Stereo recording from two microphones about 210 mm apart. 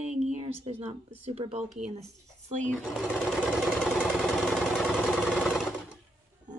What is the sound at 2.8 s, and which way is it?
Sewing machine, 5° right (ahead or behind).